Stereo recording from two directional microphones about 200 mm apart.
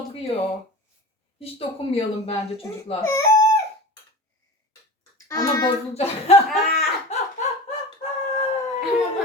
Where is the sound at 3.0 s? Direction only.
15° left (ahead or behind).